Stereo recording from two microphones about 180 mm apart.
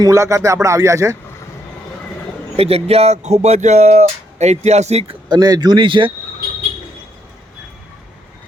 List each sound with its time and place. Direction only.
0.0 s speech: 15° right (ahead or behind)
2.6 s speech: 35° right (ahead or behind)
5.3 s speech: 20° right (ahead or behind)